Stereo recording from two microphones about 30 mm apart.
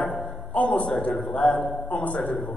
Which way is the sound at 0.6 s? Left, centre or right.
Left.